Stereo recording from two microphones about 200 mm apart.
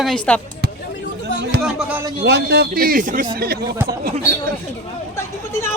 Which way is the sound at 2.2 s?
55° right (ahead or behind).